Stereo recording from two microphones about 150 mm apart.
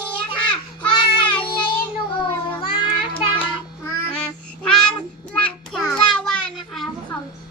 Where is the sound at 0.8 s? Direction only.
30° left (ahead or behind).